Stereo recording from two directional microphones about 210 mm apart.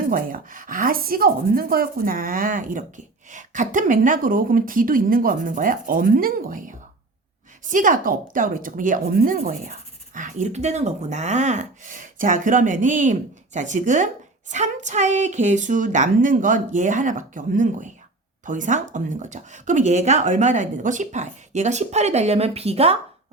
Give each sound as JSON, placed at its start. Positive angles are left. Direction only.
{"t": 0.0, "sound": "speech", "side_deg": -40}